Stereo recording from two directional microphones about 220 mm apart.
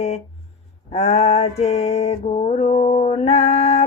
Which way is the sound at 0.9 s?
30° left (ahead or behind).